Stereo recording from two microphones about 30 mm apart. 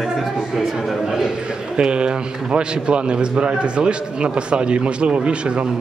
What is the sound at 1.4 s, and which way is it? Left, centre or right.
A man's voice, right.